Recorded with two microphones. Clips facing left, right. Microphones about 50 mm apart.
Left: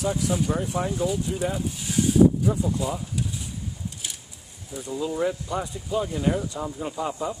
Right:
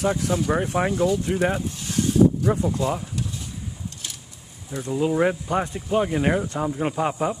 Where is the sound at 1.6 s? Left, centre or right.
Centre.